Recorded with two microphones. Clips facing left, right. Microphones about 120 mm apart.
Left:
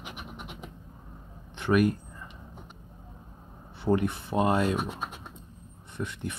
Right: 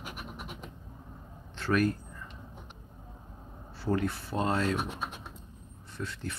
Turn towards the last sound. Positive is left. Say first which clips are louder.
# left 3 dB
turn(degrees=20)  # may be behind; listen again after turning